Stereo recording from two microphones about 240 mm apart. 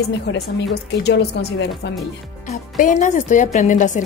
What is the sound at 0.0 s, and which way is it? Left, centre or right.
Speech, left.